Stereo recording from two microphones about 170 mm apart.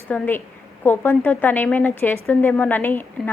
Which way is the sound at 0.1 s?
10° left (ahead or behind).